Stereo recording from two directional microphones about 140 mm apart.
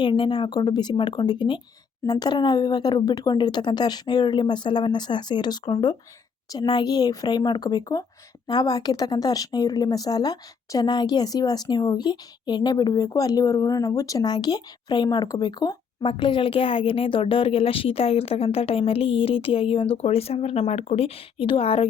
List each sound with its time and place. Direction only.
0.0 s a woman's voice: 35° left (ahead or behind)